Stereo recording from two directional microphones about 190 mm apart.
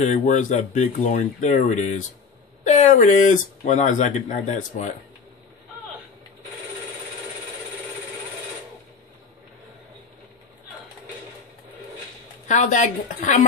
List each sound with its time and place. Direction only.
0.0 s speech: 40° left (ahead or behind)
12.4 s speech: 40° left (ahead or behind)